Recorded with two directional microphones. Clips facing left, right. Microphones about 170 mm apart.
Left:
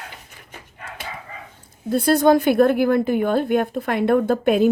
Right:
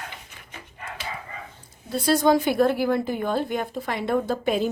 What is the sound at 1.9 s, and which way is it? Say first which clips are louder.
A woman's voice: left 4 dB; 55° left (ahead or behind).